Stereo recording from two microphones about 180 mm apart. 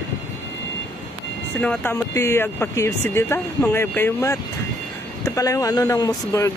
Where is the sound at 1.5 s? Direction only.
10° left (ahead or behind).